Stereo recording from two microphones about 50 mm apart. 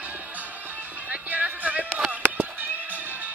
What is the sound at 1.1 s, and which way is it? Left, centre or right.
Music, right.